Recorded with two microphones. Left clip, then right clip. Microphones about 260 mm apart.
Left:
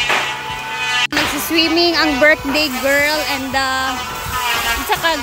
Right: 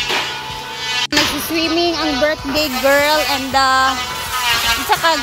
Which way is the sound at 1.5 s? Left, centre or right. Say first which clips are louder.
Left 2 dB; centre.